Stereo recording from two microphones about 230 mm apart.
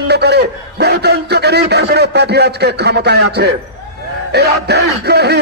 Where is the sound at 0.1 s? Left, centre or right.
Right.